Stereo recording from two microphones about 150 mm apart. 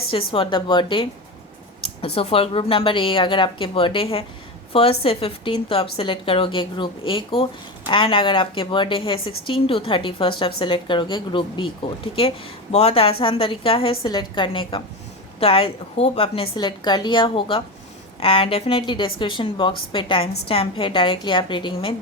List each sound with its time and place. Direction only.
0.1 s a woman's voice: 35° left (ahead or behind)